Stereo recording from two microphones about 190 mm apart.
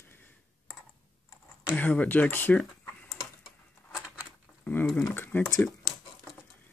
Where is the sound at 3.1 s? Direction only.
20° left (ahead or behind).